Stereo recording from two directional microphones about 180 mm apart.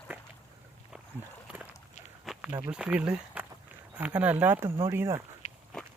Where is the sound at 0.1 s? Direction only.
10° right (ahead or behind).